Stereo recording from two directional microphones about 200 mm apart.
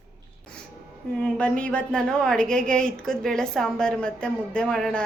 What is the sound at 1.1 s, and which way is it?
A woman's voice, 5° left (ahead or behind).